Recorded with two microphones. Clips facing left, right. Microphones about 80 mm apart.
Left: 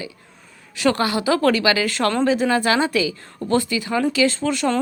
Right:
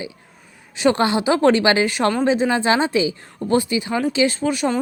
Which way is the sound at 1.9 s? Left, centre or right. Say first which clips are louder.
Right 1 dB; centre.